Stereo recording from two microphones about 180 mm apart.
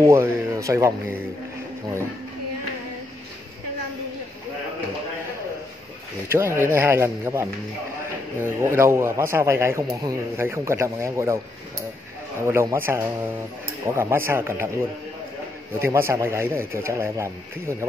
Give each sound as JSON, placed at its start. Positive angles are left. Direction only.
{"t": 0.0, "sound": "a man's voice", "side_deg": -15}
{"t": 6.2, "sound": "a man's voice", "side_deg": -15}
{"t": 12.4, "sound": "a man's voice", "side_deg": -15}
{"t": 15.8, "sound": "a man's voice", "side_deg": -15}